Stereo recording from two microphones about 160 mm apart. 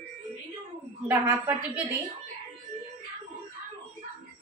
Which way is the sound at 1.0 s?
15° right (ahead or behind).